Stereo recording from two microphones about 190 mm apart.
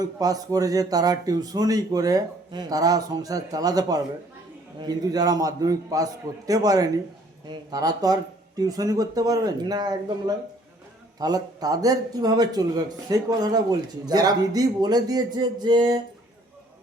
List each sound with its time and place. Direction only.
0.0 s speech: 20° right (ahead or behind)